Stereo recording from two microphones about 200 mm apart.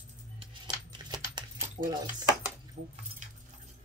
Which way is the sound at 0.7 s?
20° right (ahead or behind).